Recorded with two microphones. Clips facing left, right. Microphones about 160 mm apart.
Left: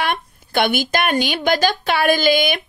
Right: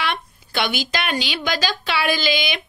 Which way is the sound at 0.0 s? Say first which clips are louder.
Left 3 dB; 50° left (ahead or behind).